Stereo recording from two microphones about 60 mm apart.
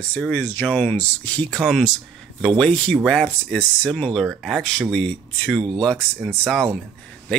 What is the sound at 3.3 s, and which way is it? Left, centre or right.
Speech, left.